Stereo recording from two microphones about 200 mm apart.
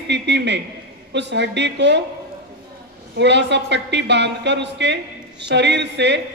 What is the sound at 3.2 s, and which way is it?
A woman's voice, 60° right (ahead or behind).